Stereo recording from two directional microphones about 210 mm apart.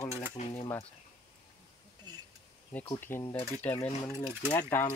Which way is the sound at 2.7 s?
15° left (ahead or behind).